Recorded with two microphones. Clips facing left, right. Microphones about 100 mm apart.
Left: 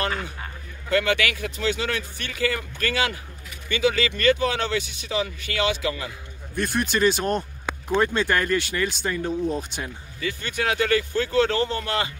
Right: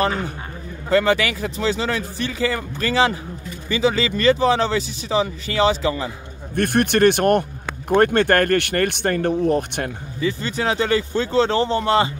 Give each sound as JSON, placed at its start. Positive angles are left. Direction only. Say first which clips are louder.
{"t": 0.8, "sound": "speech", "louder": "right 5 dB", "side_deg": -35}
{"t": 6.5, "sound": "speech", "louder": "right 6 dB", "side_deg": -60}
{"t": 10.2, "sound": "speech", "louder": "right 5 dB", "side_deg": -30}